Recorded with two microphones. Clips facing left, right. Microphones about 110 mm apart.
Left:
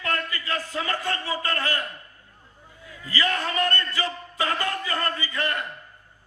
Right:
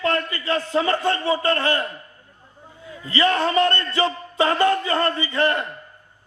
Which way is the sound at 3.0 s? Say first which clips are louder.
Right 7 dB; 30° right (ahead or behind).